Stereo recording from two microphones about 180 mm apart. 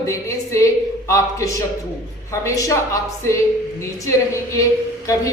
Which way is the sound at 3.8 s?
15° left (ahead or behind).